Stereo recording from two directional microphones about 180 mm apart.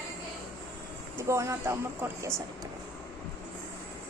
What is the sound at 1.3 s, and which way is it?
Speech, 15° right (ahead or behind).